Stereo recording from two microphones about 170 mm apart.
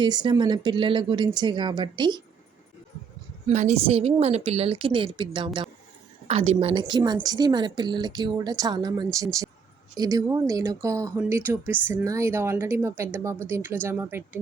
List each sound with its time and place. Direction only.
0.0 s speech: 25° right (ahead or behind)
3.4 s a woman's voice: 45° right (ahead or behind); by 5.5 s 30° right (ahead or behind)
6.2 s speech: 40° right (ahead or behind); by 14.3 s 15° right (ahead or behind)